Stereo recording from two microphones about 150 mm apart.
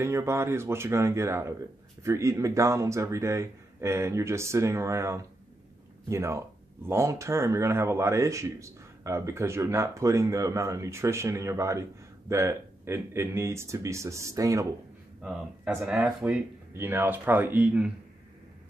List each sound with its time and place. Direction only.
0.0 s speech: 15° right (ahead or behind)
15.7 s speech: 10° right (ahead or behind)